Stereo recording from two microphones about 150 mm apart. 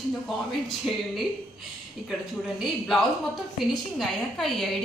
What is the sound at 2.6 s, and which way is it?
A woman's voice, centre (ahead or behind).